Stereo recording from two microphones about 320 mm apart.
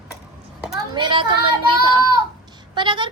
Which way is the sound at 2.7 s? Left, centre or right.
Centre.